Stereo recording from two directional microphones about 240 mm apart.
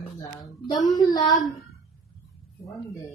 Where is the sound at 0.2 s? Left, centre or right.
Centre.